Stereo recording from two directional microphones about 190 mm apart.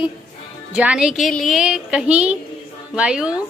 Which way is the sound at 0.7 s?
5° right (ahead or behind).